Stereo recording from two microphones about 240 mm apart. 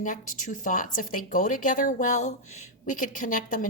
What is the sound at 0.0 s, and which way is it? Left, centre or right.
Speech, left.